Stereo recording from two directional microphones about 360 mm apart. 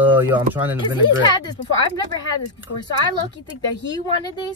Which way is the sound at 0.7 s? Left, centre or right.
Centre.